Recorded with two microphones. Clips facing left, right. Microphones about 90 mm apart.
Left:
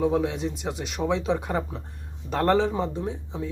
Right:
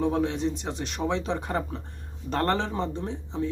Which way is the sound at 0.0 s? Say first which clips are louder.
Left 1 dB; 5° left (ahead or behind).